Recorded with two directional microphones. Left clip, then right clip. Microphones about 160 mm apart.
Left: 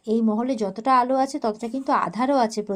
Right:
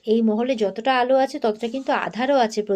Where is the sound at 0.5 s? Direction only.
20° left (ahead or behind).